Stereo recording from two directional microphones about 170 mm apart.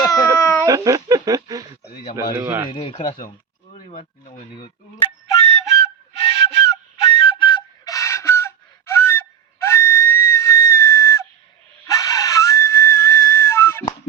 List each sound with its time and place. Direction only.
0.0 s a sound: 20° left (ahead or behind)
0.7 s speech: 20° right (ahead or behind)
2.6 s speech: 30° left (ahead or behind)
5.4 s flute: 35° left (ahead or behind); by 8.5 s 15° left (ahead or behind)
9.0 s gasp: 15° left (ahead or behind)
9.6 s whistle: 15° left (ahead or behind)
11.9 s wheeze: 20° left (ahead or behind)